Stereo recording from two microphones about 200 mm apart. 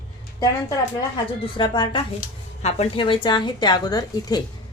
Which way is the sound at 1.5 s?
20° left (ahead or behind).